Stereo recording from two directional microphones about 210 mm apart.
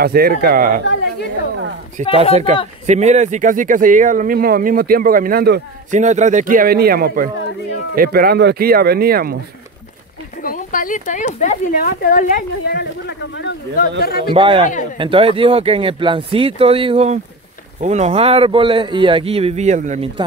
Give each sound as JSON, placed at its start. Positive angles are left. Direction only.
{"t": 0.0, "sound": "speech", "side_deg": -45}
{"t": 2.0, "sound": "speech", "side_deg": -35}
{"t": 5.9, "sound": "speech", "side_deg": -35}
{"t": 10.4, "sound": "speech", "side_deg": 40}
{"t": 14.3, "sound": "a man's voice", "side_deg": -25}